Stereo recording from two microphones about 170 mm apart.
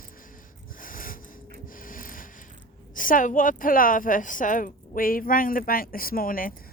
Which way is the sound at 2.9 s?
55° left (ahead or behind).